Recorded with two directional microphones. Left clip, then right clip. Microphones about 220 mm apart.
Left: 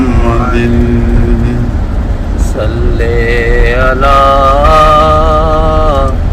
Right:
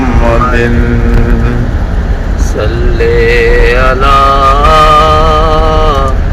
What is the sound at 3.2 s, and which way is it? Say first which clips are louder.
Music: right 3 dB; 20° left (ahead or behind).